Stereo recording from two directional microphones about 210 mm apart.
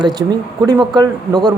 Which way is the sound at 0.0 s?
20° right (ahead or behind).